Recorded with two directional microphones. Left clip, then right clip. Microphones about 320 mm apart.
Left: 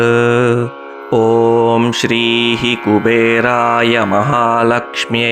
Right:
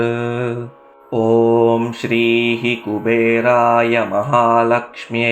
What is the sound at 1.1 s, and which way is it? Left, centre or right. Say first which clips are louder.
Mantra: left 3 dB; left.